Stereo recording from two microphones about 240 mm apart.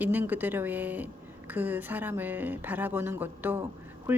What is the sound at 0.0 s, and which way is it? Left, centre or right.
A woman's voice, centre.